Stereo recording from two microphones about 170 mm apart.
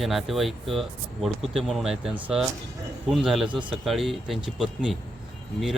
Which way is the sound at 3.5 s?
30° right (ahead or behind).